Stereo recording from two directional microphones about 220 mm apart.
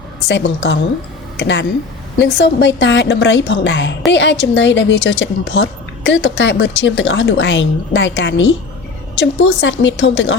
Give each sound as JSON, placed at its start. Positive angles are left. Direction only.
{"t": 0.3, "sound": "a woman's voice", "side_deg": 55}